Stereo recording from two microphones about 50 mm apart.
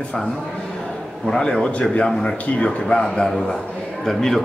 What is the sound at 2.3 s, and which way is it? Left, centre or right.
A man's voice, left.